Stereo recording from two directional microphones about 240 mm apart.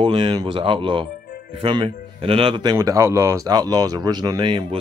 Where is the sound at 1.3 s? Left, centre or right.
Left.